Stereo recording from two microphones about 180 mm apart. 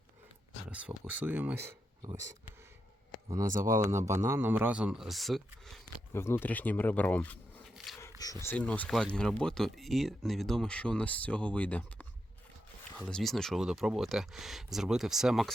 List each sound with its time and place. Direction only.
0.7 s speech: 5° right (ahead or behind)
2.0 s speech: 25° right (ahead or behind)
3.8 s speech: 15° right (ahead or behind); by 5.8 s centre (ahead or behind)
6.1 s speech: 15° left (ahead or behind)